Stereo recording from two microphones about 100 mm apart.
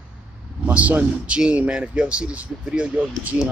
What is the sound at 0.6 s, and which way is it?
A man's voice, 15° right (ahead or behind).